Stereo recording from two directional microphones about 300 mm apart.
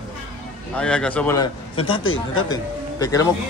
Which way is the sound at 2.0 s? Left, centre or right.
Left.